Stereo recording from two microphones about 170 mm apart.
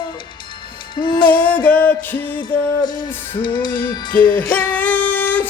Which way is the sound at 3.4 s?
25° left (ahead or behind).